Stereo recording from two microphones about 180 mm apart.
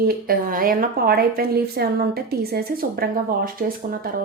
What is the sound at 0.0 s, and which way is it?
A woman's voice, 55° right (ahead or behind).